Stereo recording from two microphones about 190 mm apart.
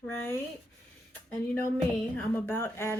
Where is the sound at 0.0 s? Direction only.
10° left (ahead or behind).